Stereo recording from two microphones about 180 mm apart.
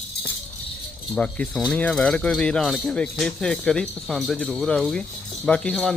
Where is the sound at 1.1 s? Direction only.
5° left (ahead or behind).